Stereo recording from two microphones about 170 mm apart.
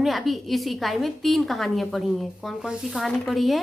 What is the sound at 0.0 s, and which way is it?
A woman's voice, centre (ahead or behind).